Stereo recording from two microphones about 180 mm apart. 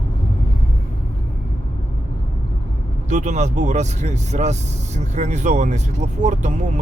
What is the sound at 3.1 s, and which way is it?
Speech, 40° right (ahead or behind).